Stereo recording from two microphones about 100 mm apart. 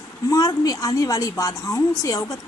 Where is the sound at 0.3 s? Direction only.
35° left (ahead or behind).